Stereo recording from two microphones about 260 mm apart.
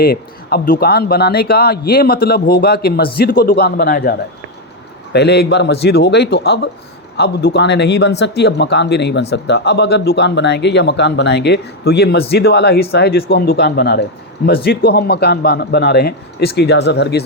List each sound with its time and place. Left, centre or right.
0.0 s speech: left
5.1 s speech: left